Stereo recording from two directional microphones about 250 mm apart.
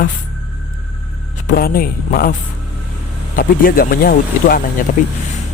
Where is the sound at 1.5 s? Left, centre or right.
Left.